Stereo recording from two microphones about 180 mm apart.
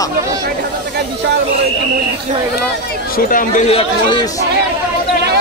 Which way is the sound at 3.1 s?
50° left (ahead or behind).